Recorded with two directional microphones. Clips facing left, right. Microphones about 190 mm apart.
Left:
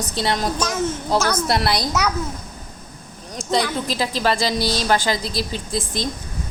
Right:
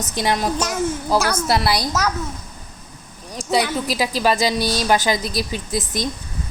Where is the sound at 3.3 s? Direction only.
10° right (ahead or behind).